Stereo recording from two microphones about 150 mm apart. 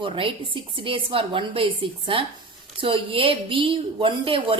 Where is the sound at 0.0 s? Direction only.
35° right (ahead or behind).